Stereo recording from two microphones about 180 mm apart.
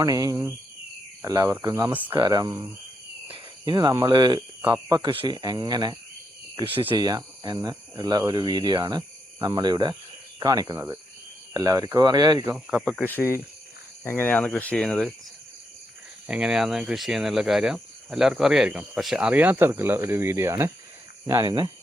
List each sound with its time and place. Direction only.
0.0 s speech: 20° right (ahead or behind)
2.1 s speech: 20° right (ahead or behind)
12.8 s speech: 10° left (ahead or behind)
16.2 s speech: 5° right (ahead or behind); by 21.7 s 25° right (ahead or behind)